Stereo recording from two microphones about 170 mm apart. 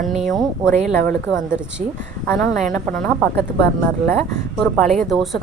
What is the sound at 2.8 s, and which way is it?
Speech, 5° left (ahead or behind).